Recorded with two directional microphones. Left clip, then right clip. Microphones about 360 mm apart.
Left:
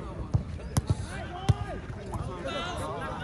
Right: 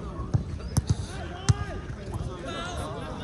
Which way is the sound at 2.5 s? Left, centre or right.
Left.